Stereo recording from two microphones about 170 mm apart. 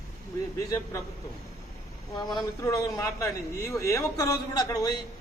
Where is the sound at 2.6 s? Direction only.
20° left (ahead or behind).